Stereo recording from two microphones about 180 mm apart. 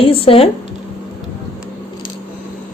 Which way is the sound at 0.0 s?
30° left (ahead or behind).